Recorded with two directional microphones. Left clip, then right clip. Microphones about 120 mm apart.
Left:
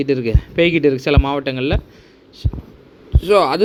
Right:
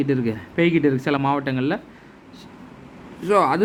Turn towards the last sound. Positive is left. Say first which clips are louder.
# left 4 dB
turn(degrees=40)  # may be behind; listen again after turning